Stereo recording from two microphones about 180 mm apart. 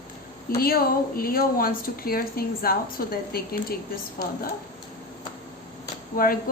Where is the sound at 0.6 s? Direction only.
55° left (ahead or behind).